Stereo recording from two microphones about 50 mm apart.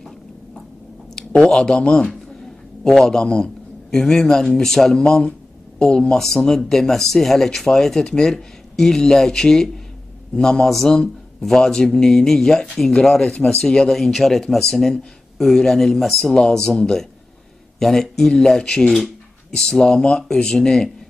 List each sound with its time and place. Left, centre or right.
1.1 s speech: centre
13.3 s speech: left
13.6 s speech: centre